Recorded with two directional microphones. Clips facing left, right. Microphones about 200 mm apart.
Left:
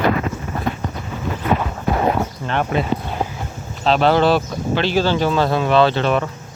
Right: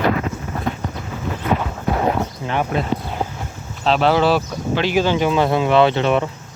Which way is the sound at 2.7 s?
Centre (ahead or behind).